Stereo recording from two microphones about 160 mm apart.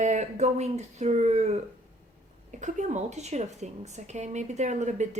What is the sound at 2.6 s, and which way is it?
Speech, 50° right (ahead or behind).